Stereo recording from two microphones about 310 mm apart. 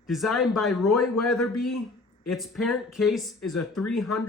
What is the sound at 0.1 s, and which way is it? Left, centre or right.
Speech, centre.